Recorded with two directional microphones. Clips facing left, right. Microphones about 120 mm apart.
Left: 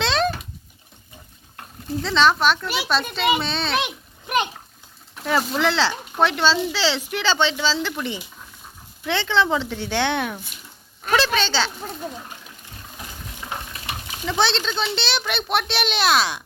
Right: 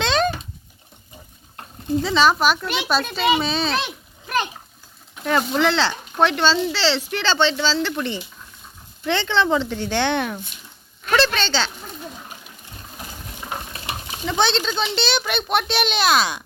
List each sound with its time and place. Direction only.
0.0 s a sound: centre (ahead or behind)
2.0 s speech: 5° right (ahead or behind)
3.8 s a sound: 15° left (ahead or behind)
5.1 s speech: centre (ahead or behind)
13.5 s stir: 30° right (ahead or behind)
14.3 s speech: centre (ahead or behind)